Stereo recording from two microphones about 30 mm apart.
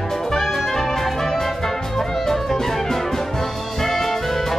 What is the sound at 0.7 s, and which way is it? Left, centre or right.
Music, centre.